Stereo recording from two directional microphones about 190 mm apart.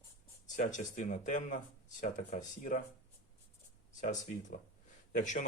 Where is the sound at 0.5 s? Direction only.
40° left (ahead or behind).